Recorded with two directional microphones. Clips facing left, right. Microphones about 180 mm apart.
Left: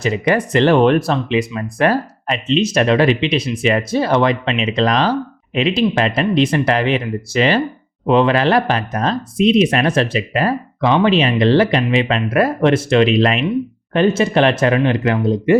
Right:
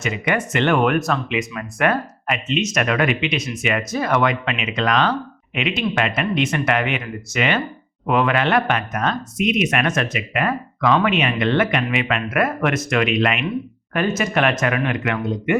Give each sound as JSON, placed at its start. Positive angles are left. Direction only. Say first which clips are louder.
{"t": 0.0, "sound": "speech", "louder": "left 6 dB", "side_deg": 35}